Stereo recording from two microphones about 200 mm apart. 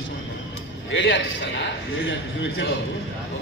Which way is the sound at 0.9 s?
65° left (ahead or behind).